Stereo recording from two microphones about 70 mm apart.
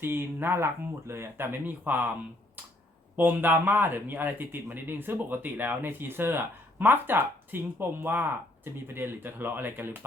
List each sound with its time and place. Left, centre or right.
0.0 s speech: right
3.2 s speech: right